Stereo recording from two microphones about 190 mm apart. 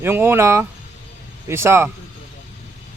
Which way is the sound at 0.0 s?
10° right (ahead or behind).